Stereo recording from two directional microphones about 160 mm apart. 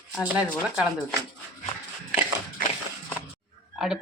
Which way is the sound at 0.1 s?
10° right (ahead or behind).